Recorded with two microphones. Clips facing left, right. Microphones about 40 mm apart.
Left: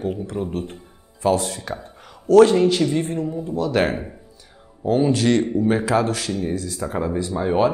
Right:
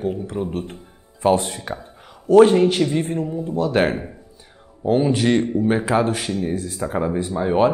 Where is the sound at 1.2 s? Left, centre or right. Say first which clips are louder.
Right 2 dB; right.